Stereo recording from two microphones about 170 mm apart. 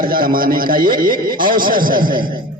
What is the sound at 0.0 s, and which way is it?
A man's voice, 55° right (ahead or behind).